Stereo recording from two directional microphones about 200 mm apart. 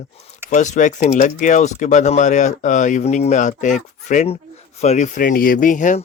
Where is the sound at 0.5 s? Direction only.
35° left (ahead or behind).